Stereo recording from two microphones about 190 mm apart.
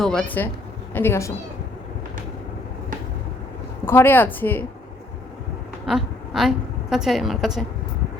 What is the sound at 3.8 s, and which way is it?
Speech, 10° left (ahead or behind).